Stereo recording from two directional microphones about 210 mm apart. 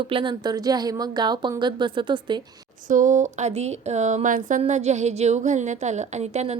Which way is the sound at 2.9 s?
35° right (ahead or behind).